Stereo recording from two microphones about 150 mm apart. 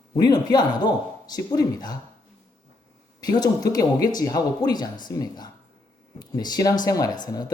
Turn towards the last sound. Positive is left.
turn(degrees=25)  # may be behind; listen again after turning